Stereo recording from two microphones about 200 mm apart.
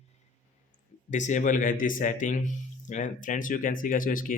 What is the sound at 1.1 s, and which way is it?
A man's voice, 40° left (ahead or behind).